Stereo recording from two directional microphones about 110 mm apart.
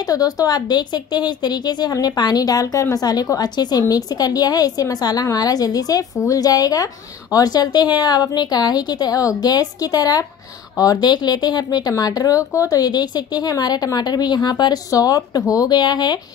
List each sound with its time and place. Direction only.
0.0 s speech: 35° left (ahead or behind)